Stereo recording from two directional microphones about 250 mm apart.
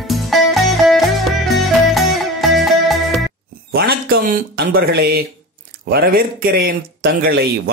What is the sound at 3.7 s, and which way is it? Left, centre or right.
Speech, right.